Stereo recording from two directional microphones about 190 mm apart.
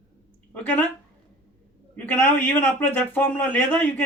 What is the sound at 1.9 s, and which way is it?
A man's voice, 10° left (ahead or behind).